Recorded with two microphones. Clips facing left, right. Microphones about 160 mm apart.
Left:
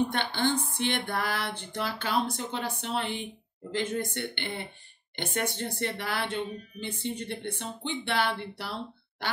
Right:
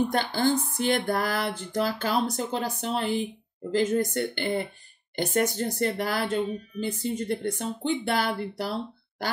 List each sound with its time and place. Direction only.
0.1 s speech: 40° right (ahead or behind)